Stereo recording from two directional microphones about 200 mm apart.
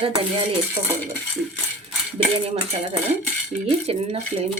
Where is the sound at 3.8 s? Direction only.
30° right (ahead or behind).